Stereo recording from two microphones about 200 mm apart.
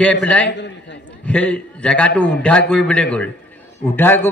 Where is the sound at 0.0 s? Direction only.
5° left (ahead or behind).